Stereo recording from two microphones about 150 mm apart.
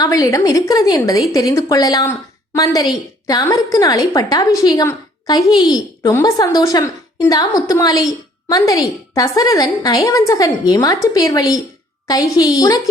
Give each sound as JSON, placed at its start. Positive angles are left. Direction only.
{"t": 0.0, "sound": "a woman's voice", "side_deg": 20}